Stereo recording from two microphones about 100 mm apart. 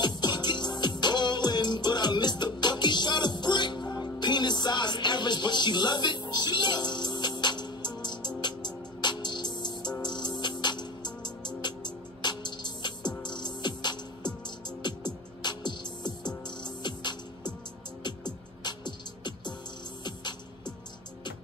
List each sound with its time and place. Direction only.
0.0 s music: 45° left (ahead or behind)